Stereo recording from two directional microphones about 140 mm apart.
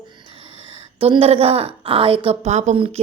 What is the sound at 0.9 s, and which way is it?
A woman's voice, 40° right (ahead or behind).